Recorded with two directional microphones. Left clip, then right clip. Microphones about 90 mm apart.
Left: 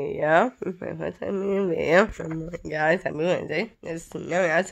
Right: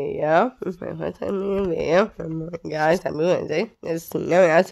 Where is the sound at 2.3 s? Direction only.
25° right (ahead or behind); by 3.7 s 50° right (ahead or behind).